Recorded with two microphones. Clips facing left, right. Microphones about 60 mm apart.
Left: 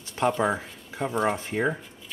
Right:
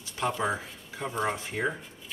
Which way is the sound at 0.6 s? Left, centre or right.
Centre.